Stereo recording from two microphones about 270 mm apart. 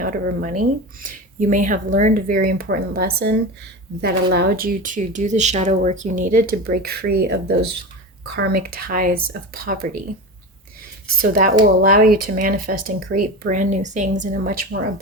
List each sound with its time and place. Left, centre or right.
0.0 s speech: right
11.2 s speech: right